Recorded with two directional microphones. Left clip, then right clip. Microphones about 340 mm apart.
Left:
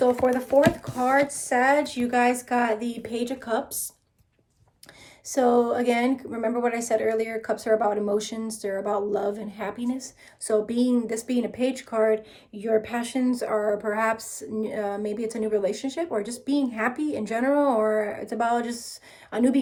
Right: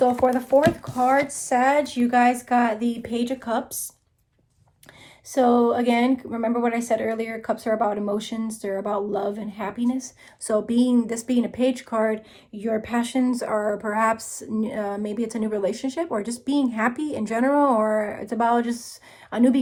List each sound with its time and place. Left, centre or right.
0.3 s a woman's voice: centre
5.2 s a woman's voice: centre